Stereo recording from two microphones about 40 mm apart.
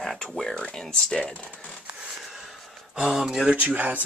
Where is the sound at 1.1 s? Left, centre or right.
Left.